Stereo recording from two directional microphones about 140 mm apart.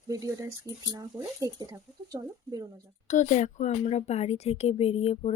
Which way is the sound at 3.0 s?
60° left (ahead or behind).